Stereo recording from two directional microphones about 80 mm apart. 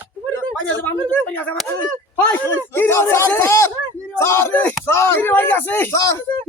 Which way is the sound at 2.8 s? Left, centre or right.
Left.